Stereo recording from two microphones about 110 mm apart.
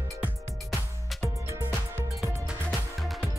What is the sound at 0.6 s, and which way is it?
Music, centre (ahead or behind).